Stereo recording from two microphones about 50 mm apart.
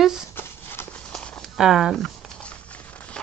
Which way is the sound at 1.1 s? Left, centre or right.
Centre.